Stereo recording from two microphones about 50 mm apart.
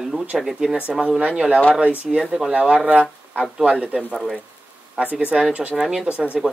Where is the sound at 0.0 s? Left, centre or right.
Centre.